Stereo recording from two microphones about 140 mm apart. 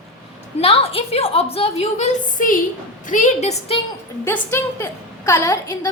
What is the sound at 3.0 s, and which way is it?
Speech, 65° left (ahead or behind).